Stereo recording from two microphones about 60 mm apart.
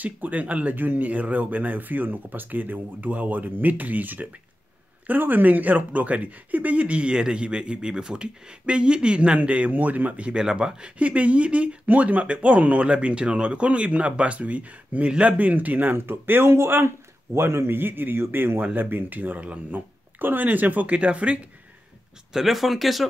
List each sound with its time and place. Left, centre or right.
0.0 s speech: right
17.7 s speech: right
22.3 s speech: centre